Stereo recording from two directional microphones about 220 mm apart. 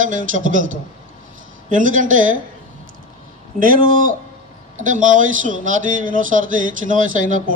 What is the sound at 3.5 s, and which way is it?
A man's voice, 40° right (ahead or behind).